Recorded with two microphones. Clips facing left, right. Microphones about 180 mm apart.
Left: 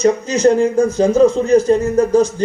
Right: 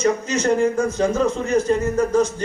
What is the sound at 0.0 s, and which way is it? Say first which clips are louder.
Speech: left 7 dB; 35° left (ahead or behind).